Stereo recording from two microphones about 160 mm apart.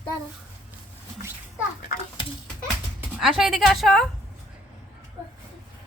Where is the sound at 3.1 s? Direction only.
5° right (ahead or behind).